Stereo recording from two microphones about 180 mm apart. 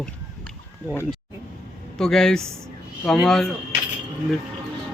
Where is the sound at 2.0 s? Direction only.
5° left (ahead or behind).